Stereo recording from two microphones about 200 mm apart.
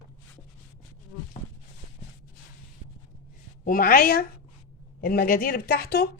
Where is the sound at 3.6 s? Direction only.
45° left (ahead or behind).